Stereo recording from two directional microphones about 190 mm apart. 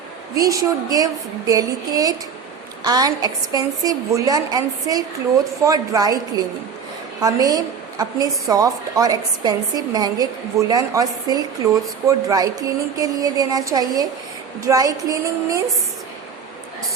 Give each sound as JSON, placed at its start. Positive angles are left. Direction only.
{"t": 0.3, "sound": "a woman's voice", "side_deg": -20}
{"t": 14.6, "sound": "female singing", "side_deg": -20}